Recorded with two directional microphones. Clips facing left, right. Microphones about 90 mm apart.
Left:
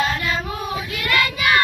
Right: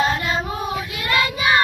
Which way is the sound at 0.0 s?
25° right (ahead or behind).